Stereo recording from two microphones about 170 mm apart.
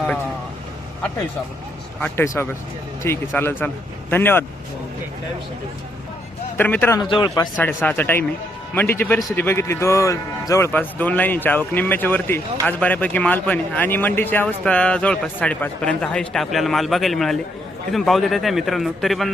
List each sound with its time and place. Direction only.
2.0 s a man's voice: 15° left (ahead or behind)
6.6 s a man's voice: 10° left (ahead or behind)
7.0 s speech: 25° left (ahead or behind)
7.5 s a man's voice: 10° left (ahead or behind)